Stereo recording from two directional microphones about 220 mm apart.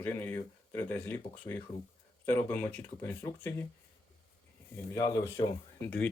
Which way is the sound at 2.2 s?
10° left (ahead or behind).